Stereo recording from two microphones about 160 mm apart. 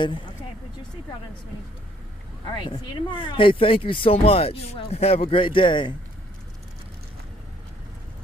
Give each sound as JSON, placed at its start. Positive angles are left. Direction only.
{"t": 2.4, "sound": "speech", "side_deg": 30}